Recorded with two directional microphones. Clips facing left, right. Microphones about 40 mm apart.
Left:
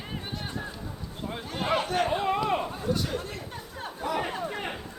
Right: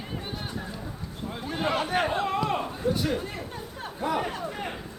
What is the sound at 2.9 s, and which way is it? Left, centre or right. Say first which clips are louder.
Chatter: right 3 dB; centre.